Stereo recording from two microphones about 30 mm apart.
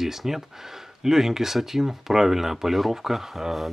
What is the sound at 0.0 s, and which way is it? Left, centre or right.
Speech, centre.